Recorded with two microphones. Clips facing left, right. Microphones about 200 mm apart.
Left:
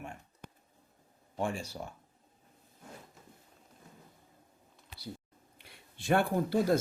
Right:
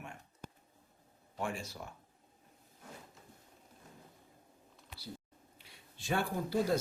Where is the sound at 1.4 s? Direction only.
30° left (ahead or behind).